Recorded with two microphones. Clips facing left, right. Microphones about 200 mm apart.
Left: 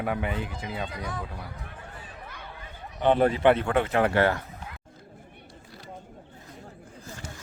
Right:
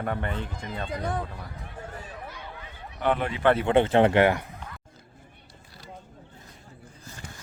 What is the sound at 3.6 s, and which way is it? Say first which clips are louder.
Speech: right 4 dB; 30° right (ahead or behind).